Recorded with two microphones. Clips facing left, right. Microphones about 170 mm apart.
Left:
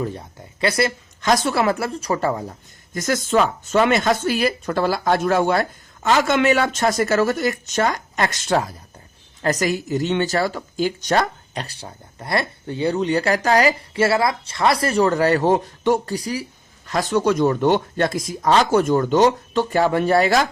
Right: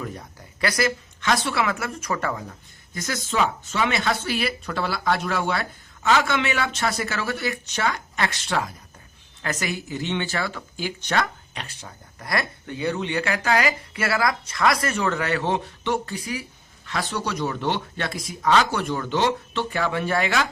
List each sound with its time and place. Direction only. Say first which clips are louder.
0.0 s speech: left 7 dB; 25° left (ahead or behind)
2.9 s speech: left 8 dB; 50° left (ahead or behind)